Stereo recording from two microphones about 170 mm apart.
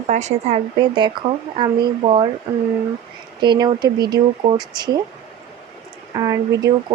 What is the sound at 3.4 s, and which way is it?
Speech, 25° right (ahead or behind).